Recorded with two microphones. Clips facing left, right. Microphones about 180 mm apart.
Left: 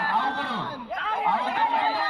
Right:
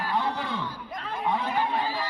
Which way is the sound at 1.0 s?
90° left.